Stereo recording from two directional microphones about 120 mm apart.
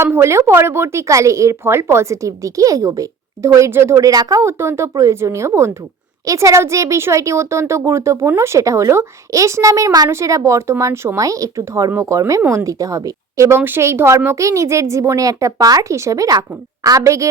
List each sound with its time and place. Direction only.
0.0 s speech: 20° right (ahead or behind)